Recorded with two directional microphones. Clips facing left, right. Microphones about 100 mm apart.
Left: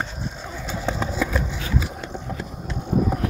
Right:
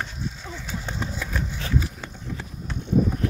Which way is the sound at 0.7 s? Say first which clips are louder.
Left 6 dB; 90° left.